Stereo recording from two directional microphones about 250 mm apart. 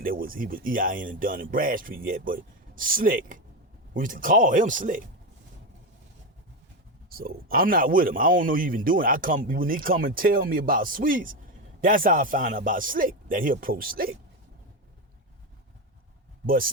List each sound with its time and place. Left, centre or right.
0.0 s speech: right
7.1 s speech: right